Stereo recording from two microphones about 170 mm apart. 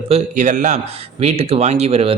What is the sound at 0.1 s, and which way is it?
A man's voice, 45° right (ahead or behind).